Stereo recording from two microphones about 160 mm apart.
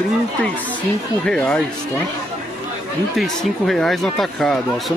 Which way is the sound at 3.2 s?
Centre (ahead or behind).